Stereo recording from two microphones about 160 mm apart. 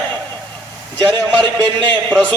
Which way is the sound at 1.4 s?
25° right (ahead or behind).